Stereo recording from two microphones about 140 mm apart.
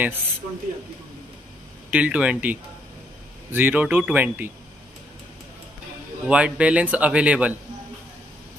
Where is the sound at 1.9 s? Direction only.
10° right (ahead or behind).